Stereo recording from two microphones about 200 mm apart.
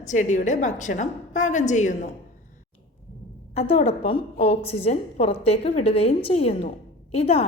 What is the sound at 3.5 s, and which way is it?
A woman's voice, 30° left (ahead or behind).